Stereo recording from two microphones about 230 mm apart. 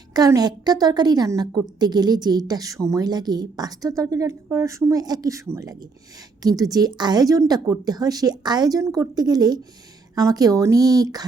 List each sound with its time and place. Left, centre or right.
0.1 s a woman's voice: centre